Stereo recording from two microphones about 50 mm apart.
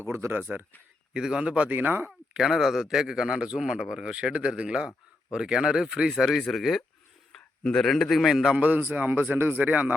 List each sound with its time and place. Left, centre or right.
0.0 s speech: right
0.3 s a man's voice: right
1.1 s a man's voice: centre
1.7 s a man's voice: right
2.3 s a man's voice: centre
7.6 s speech: centre
8.6 s a man's voice: right